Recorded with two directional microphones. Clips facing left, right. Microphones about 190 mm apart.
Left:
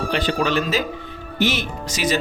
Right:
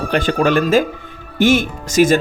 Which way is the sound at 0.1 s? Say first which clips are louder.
Right 7 dB; 50° right (ahead or behind).